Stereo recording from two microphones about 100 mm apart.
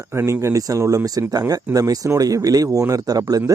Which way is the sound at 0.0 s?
25° right (ahead or behind).